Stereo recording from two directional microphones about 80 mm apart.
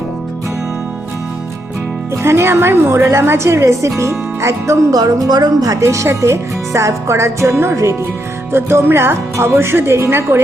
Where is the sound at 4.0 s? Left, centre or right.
Right.